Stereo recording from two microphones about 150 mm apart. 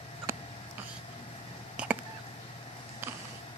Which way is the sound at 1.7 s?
10° right (ahead or behind).